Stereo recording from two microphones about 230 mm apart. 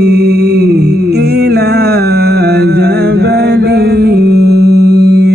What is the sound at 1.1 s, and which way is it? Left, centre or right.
Music, right.